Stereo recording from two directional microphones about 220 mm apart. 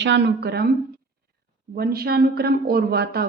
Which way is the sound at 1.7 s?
45° right (ahead or behind).